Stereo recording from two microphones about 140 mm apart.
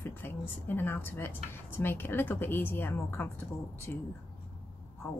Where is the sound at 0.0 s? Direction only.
15° left (ahead or behind).